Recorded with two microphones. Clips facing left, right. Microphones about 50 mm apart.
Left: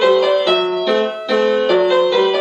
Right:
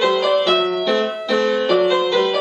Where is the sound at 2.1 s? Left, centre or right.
Centre.